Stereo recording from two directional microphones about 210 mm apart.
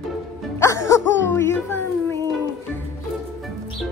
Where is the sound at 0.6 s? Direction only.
15° left (ahead or behind).